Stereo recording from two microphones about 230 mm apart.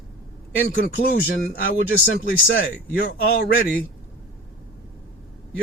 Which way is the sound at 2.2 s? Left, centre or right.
Left.